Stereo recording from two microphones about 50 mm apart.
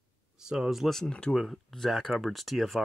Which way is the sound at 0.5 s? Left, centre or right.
Centre.